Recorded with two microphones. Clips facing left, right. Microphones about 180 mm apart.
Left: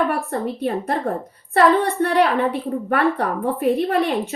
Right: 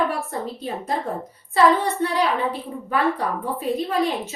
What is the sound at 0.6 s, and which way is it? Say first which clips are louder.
A woman's voice: left 5 dB; 60° left (ahead or behind).